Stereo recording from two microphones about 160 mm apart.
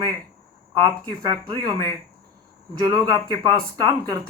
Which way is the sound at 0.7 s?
30° right (ahead or behind).